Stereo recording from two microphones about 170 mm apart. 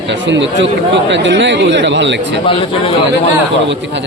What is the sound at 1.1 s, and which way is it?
Speech, 90° right.